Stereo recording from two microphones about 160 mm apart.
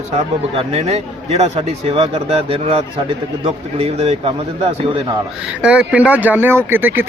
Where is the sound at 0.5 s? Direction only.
40° right (ahead or behind).